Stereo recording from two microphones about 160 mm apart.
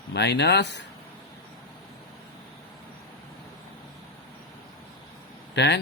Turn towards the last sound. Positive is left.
turn(degrees=90)